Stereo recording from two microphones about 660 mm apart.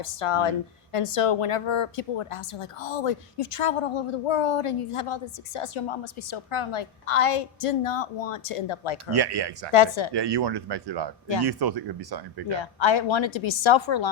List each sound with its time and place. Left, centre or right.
0.0 s a woman's voice: left
9.0 s speech: right
9.7 s a woman's voice: left
10.1 s speech: right
12.5 s a woman's voice: left